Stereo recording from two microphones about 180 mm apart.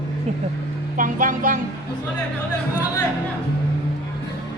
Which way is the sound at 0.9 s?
45° right (ahead or behind).